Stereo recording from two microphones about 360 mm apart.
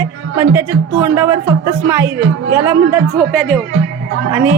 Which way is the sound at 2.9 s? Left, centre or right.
Centre.